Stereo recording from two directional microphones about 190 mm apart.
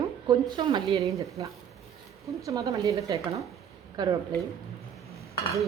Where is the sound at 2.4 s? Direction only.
15° right (ahead or behind).